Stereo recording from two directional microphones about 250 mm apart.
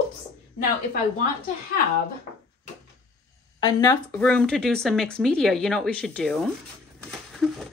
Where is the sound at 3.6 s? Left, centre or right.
Centre.